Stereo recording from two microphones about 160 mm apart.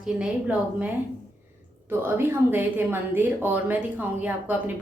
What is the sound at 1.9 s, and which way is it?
A woman's voice, 15° right (ahead or behind).